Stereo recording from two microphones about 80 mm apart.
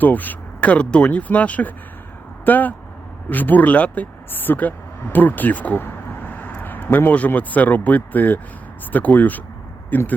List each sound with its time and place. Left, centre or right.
0.0 s speech: left